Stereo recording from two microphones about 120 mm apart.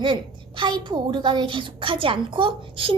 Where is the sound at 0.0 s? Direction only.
40° right (ahead or behind).